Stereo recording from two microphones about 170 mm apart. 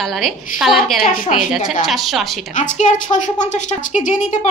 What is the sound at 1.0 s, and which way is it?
Speech, 55° left (ahead or behind).